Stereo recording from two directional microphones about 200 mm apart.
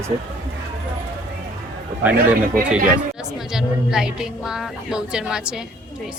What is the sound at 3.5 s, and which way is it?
Speech, 5° right (ahead or behind).